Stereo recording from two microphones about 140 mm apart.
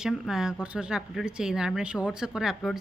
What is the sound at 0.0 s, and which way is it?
Speech, 5° right (ahead or behind).